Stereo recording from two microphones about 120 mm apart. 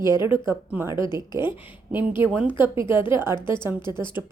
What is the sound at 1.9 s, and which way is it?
Speech, 20° right (ahead or behind).